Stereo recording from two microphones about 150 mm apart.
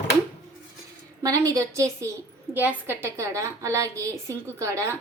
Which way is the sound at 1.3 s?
20° right (ahead or behind).